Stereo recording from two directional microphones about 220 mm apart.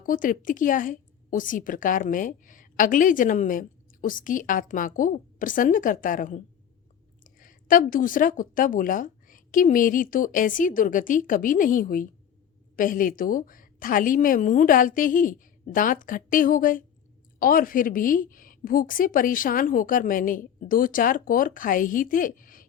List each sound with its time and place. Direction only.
0.0 s a woman's voice: 40° left (ahead or behind)